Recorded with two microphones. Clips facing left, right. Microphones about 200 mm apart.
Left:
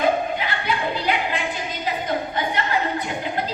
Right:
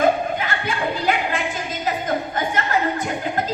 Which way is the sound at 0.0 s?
45° right (ahead or behind).